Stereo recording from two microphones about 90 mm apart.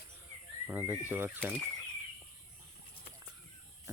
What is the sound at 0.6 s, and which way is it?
Speech, 20° right (ahead or behind).